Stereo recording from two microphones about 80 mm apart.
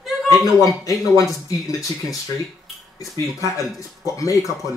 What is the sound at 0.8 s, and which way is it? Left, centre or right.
Speech, left.